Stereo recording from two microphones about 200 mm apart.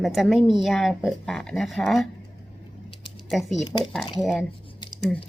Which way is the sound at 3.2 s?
Centre (ahead or behind).